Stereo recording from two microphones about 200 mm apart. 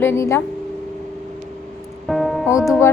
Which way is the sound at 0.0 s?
10° left (ahead or behind).